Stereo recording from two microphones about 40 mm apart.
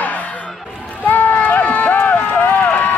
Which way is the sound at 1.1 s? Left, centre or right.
Left.